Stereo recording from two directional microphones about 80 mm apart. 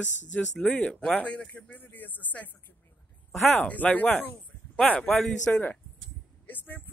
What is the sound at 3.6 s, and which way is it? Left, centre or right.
Speech, centre.